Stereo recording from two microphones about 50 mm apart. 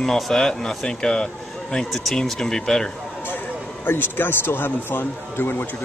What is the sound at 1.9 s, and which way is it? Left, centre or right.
Speech, centre.